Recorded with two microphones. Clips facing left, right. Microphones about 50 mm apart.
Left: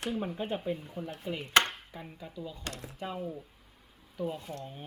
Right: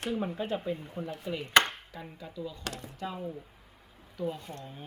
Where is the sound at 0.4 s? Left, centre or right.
Centre.